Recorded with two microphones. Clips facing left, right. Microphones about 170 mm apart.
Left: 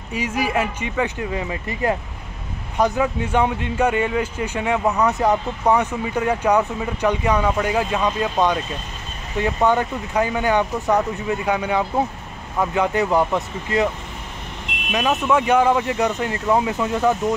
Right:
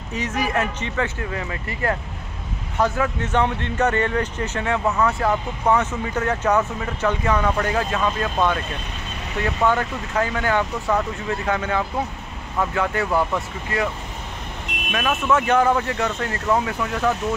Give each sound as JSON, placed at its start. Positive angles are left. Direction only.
{"t": 0.1, "sound": "speech", "side_deg": 10}
{"t": 14.9, "sound": "speech", "side_deg": 20}